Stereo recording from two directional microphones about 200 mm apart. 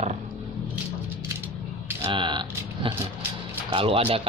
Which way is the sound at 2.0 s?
25° right (ahead or behind).